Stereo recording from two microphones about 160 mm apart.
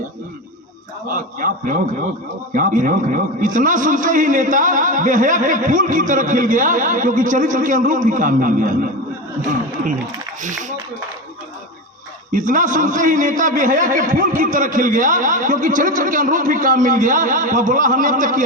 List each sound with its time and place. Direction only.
1.0 s a man's voice: 60° right (ahead or behind)
12.3 s a man's voice: 55° right (ahead or behind)